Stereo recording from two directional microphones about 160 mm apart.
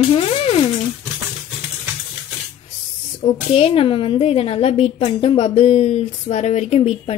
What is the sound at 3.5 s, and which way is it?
A woman's voice, 35° left (ahead or behind).